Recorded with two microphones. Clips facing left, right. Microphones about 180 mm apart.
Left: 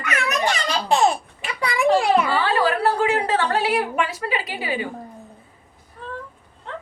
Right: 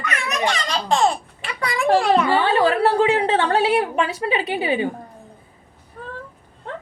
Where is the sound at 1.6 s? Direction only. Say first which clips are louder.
Even; 15° left (ahead or behind).